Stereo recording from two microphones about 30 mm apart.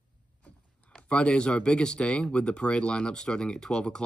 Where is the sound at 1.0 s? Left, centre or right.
Left.